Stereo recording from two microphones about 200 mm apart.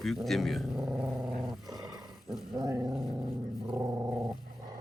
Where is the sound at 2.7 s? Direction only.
20° right (ahead or behind).